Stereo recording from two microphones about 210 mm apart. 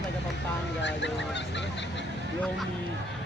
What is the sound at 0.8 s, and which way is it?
Fowl, 55° left (ahead or behind).